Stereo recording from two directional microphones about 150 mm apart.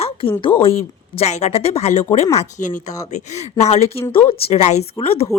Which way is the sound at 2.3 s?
60° left (ahead or behind).